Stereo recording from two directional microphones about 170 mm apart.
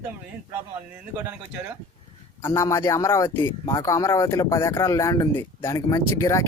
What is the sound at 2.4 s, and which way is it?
Speech, 20° left (ahead or behind).